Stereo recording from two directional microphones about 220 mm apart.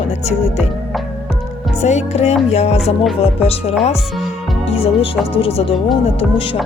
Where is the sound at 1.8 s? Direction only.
30° left (ahead or behind).